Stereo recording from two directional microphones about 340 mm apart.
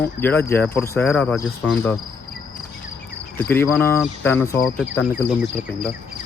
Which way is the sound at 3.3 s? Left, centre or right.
Centre.